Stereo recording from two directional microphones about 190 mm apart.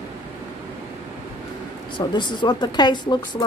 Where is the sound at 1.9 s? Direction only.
25° left (ahead or behind).